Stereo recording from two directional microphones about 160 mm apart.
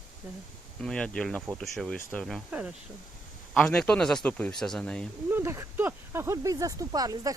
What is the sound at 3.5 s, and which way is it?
Speech, 5° left (ahead or behind).